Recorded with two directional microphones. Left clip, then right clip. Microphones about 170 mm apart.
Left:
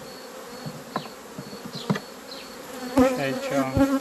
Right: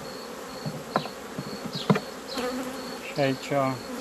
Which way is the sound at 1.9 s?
5° left (ahead or behind).